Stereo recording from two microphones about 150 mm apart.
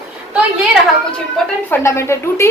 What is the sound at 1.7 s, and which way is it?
Speech, 20° left (ahead or behind).